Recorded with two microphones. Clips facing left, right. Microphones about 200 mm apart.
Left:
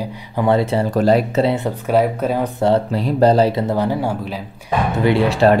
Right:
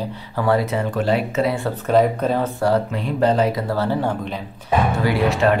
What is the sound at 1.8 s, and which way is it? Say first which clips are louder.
Speech: right 1 dB; 10° left (ahead or behind).